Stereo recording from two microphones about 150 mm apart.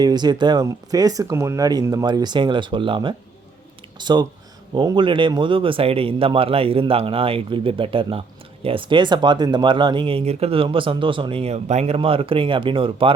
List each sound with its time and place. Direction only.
0.0 s speech: 30° right (ahead or behind)